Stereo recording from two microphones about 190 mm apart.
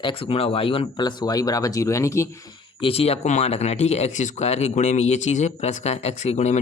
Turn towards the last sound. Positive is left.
turn(degrees=35)  # may be behind; listen again after turning